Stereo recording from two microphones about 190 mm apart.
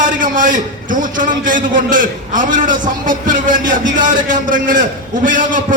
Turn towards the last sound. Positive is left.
turn(degrees=-45)  # may be behind; listen again after turning